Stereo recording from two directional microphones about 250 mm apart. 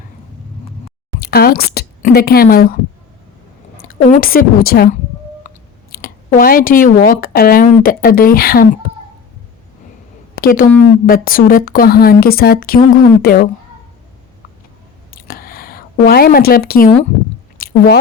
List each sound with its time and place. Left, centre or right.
1.2 s a woman's voice: left
3.8 s a woman's voice: left
10.4 s speech: left
15.1 s a sound: left
17.6 s chewing: left